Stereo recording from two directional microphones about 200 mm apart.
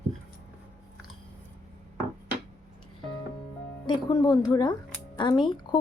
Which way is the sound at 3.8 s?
20° left (ahead or behind).